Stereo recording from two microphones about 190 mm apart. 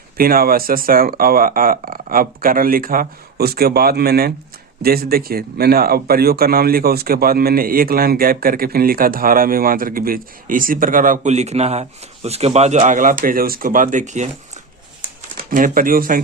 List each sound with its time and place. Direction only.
0.2 s speech: 50° right (ahead or behind)
15.5 s speech: 45° right (ahead or behind)